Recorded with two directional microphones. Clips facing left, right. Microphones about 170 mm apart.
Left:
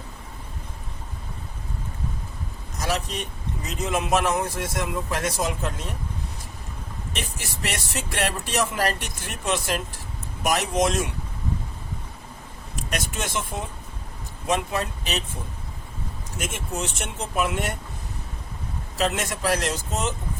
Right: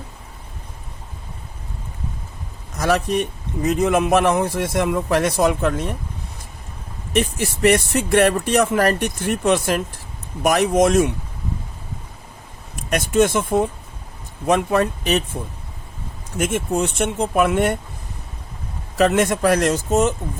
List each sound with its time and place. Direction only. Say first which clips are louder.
2.7 s a man's voice: right 9 dB; 55° right (ahead or behind)
7.1 s a man's voice: right 15 dB; 55° right (ahead or behind)
12.7 s a man's voice: right 12 dB; 55° right (ahead or behind)
16.4 s a man's voice: right 10 dB; 55° right (ahead or behind)
18.9 s a man's voice: right 9 dB; 60° right (ahead or behind)